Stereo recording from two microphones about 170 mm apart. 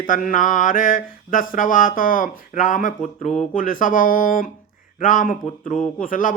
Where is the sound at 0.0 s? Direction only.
50° left (ahead or behind).